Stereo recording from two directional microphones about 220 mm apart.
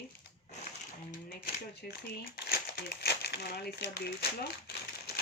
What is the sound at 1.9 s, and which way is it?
Speech, 45° left (ahead or behind).